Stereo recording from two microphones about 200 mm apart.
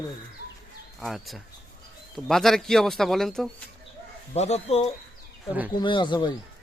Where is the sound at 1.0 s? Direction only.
Centre (ahead or behind).